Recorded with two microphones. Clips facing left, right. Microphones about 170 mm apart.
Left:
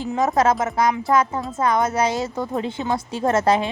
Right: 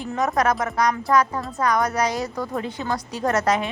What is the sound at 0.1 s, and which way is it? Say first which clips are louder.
A woman's voice: left 3 dB; 25° left (ahead or behind).